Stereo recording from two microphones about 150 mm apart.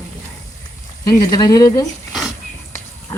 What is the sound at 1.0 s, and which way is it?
Speech, 25° left (ahead or behind).